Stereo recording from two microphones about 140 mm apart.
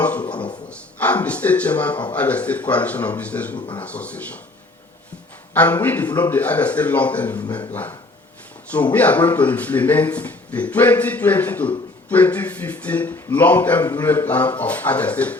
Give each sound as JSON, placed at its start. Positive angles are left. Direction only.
{"t": 0.0, "sound": "a sound", "side_deg": 10}
{"t": 0.7, "sound": "speech", "side_deg": 10}
{"t": 5.5, "sound": "speech", "side_deg": 15}
{"t": 8.7, "sound": "speech", "side_deg": 10}